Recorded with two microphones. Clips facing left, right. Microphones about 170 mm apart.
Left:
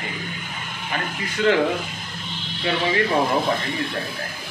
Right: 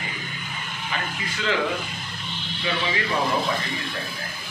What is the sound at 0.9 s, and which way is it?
Speech, 50° left (ahead or behind).